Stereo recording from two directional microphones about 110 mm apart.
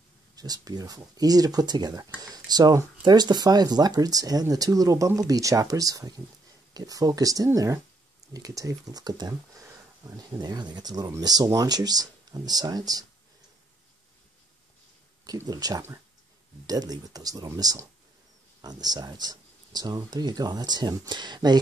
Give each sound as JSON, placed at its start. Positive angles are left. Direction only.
{"t": 0.4, "sound": "speech", "side_deg": -35}
{"t": 15.2, "sound": "speech", "side_deg": -35}